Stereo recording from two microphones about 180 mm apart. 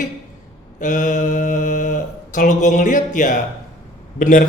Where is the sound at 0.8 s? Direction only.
45° left (ahead or behind).